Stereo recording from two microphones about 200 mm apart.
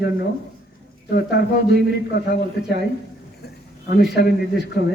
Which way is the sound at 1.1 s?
55° left (ahead or behind).